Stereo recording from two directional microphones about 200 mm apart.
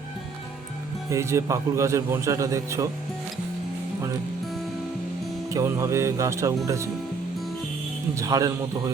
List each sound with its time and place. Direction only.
1.1 s a man's voice: 15° right (ahead or behind)
5.5 s a man's voice: 15° right (ahead or behind)
8.1 s a man's voice: 15° right (ahead or behind)